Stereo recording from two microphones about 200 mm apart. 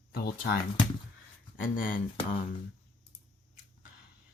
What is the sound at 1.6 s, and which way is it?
Speech, 45° left (ahead or behind).